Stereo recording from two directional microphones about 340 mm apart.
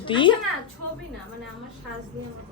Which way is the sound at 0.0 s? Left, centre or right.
Centre.